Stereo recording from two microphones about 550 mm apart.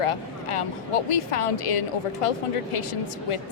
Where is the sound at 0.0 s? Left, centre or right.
Left.